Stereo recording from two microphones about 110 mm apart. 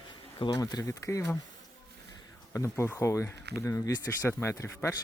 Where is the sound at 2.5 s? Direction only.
25° left (ahead or behind).